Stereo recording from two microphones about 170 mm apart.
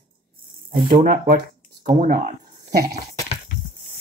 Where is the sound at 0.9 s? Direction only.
55° right (ahead or behind).